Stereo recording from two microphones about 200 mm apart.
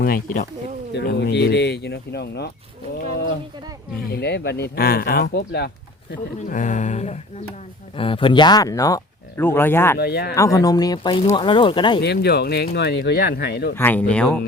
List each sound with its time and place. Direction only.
0.0 s speech: 45° left (ahead or behind)
0.9 s speech: 55° left (ahead or behind)
4.1 s speech: 55° left (ahead or behind); by 10.0 s 10° left (ahead or behind)
10.0 s speech: 55° left (ahead or behind)
10.3 s speech: 15° left (ahead or behind)
12.0 s speech: 55° left (ahead or behind)
13.7 s speech: 10° left (ahead or behind)